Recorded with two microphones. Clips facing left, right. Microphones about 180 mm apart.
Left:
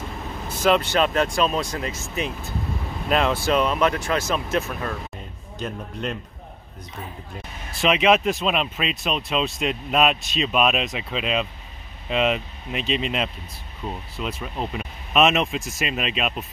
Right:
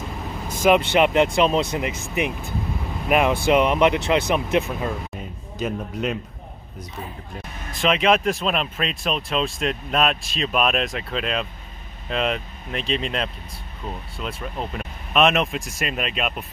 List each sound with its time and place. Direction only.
0.5 s vehicle: 10° right (ahead or behind)
0.8 s speech: 20° right (ahead or behind)
5.6 s speech: 5° right (ahead or behind)
7.8 s speech: 5° left (ahead or behind)